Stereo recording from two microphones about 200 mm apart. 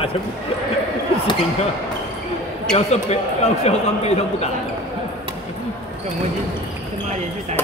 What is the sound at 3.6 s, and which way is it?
Speech, 30° left (ahead or behind).